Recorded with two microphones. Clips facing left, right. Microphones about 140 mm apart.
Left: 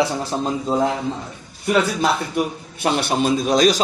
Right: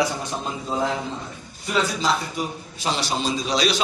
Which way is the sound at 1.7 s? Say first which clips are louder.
Left 4 dB; 60° left (ahead or behind).